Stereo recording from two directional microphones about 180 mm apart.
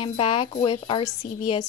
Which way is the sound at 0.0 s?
30° left (ahead or behind).